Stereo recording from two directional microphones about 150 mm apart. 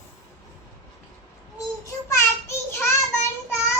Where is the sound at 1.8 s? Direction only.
20° left (ahead or behind).